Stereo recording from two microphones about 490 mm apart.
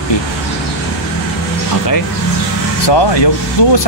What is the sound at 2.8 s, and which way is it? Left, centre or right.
Speech, left.